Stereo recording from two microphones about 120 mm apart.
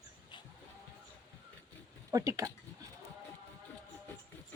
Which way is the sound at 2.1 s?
25° right (ahead or behind).